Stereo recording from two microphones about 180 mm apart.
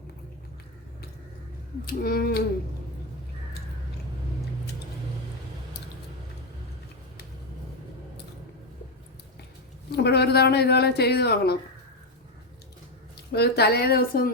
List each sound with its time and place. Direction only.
1.9 s speech: 55° left (ahead or behind)
9.9 s speech: 65° left (ahead or behind)
13.3 s speech: 65° left (ahead or behind)